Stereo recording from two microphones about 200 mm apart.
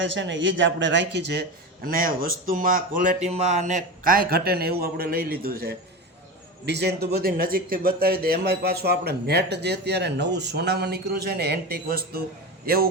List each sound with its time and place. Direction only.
0.0 s a man's voice: 65° right (ahead or behind); by 12.9 s 50° right (ahead or behind)